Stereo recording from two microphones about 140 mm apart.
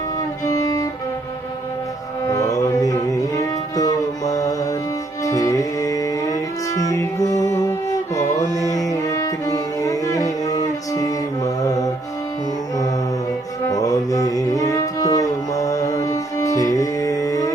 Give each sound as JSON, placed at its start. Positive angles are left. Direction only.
{"t": 0.4, "sound": "music", "side_deg": 25}
{"t": 2.2, "sound": "music", "side_deg": 25}
{"t": 8.2, "sound": "music", "side_deg": 60}
{"t": 8.5, "sound": "music", "side_deg": 25}
{"t": 13.7, "sound": "mantra", "side_deg": 25}